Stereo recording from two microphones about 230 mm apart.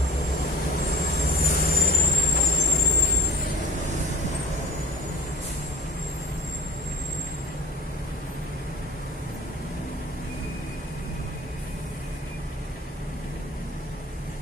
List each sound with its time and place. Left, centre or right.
1.1 s vehicle: left